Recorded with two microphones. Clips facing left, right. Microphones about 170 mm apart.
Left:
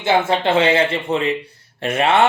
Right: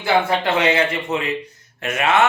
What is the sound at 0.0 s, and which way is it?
Speech, 25° left (ahead or behind).